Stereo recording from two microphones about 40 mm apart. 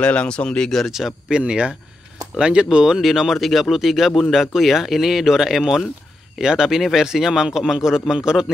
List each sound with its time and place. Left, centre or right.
0.0 s speech: left
0.7 s speech: centre
1.5 s speech: right
3.0 s speech: centre